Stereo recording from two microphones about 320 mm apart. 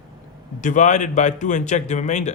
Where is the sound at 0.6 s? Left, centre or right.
Left.